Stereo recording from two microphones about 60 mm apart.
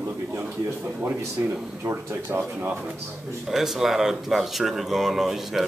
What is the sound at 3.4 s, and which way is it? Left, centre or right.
Speech, centre.